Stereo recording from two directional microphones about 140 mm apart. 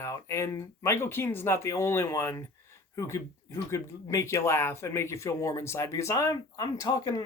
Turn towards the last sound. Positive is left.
turn(degrees=25)  # may be behind; listen again after turning